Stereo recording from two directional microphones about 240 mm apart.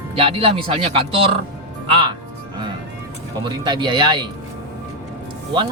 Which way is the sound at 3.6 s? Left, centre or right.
Centre.